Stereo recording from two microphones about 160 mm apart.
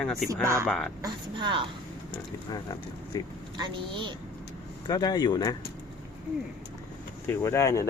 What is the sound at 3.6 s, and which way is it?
Speech, 30° right (ahead or behind).